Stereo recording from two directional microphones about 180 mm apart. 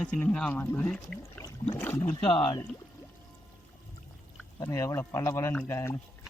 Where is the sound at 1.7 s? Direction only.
10° left (ahead or behind).